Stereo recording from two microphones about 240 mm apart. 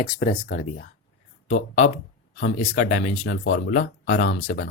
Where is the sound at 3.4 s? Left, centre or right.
Left.